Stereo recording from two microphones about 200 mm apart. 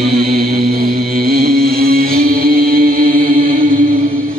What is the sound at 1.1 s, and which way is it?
Music, 50° right (ahead or behind).